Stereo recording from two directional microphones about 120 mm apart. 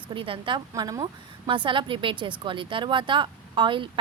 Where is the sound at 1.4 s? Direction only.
45° right (ahead or behind).